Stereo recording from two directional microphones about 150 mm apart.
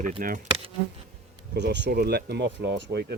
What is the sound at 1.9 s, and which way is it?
Speech, 90° right.